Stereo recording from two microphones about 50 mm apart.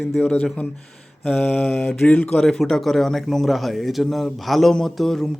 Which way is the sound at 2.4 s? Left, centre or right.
Centre.